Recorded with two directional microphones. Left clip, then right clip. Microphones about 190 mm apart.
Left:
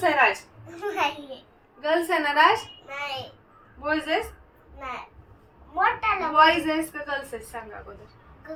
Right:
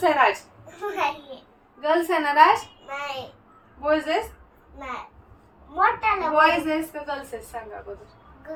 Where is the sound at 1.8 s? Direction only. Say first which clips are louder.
Right 2 dB; 15° right (ahead or behind).